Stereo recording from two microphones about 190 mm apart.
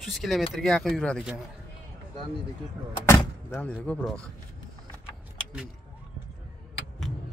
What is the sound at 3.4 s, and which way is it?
Speech, 10° left (ahead or behind).